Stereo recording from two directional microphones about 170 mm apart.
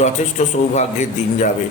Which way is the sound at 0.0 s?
45° left (ahead or behind).